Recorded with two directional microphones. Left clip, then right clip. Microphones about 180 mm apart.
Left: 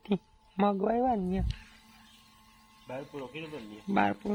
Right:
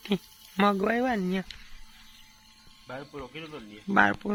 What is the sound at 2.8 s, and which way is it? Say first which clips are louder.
Speech: even; 35° right (ahead or behind).